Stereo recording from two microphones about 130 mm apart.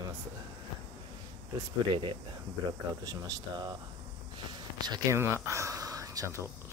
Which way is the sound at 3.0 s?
30° right (ahead or behind).